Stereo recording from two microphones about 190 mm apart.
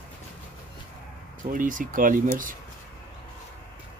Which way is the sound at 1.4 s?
45° right (ahead or behind).